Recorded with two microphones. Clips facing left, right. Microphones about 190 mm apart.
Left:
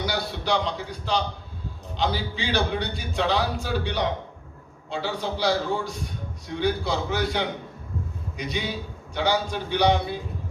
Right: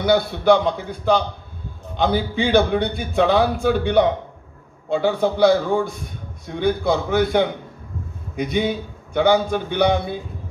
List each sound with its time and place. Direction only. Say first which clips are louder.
0.0 s a man's voice: right 11 dB; 55° right (ahead or behind)